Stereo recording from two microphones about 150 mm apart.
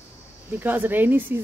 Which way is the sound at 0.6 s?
10° right (ahead or behind).